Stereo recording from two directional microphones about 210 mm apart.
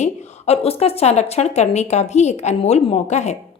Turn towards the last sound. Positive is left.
turn(degrees=35)  # may be behind; listen again after turning